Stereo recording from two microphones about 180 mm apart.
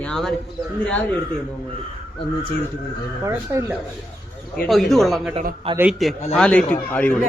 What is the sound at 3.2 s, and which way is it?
Speech, 15° right (ahead or behind).